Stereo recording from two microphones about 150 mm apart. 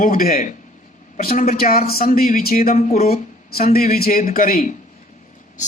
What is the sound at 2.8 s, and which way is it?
Speech, 45° left (ahead or behind).